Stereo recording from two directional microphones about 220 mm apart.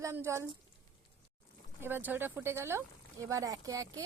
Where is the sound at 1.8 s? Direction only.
10° right (ahead or behind).